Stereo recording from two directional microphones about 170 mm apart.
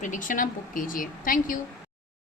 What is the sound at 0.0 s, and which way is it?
A woman's voice, 50° left (ahead or behind).